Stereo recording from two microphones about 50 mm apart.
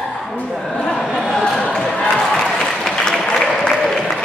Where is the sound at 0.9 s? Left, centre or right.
Centre.